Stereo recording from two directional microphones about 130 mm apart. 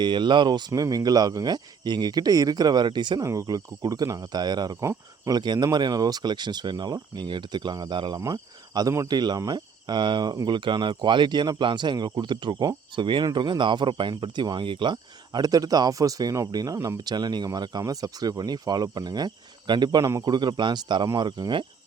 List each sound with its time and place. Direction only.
0.0 s speech: 35° right (ahead or behind)